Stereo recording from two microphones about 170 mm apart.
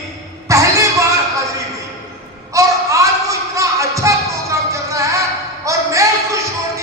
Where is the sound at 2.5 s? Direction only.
20° right (ahead or behind).